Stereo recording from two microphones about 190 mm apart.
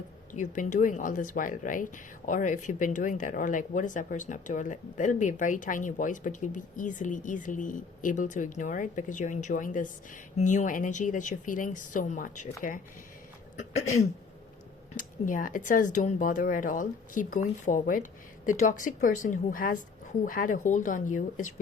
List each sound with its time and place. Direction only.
0.3 s speech: 40° left (ahead or behind)
14.9 s speech: 45° left (ahead or behind)